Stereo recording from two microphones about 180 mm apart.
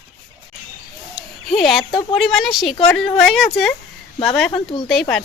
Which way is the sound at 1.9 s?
25° left (ahead or behind).